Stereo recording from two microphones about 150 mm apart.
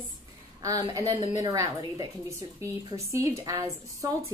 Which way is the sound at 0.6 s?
20° right (ahead or behind).